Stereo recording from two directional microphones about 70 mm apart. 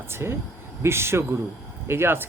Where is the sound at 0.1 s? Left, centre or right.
Right.